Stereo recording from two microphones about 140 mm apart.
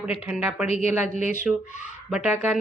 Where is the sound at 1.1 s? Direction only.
60° left (ahead or behind).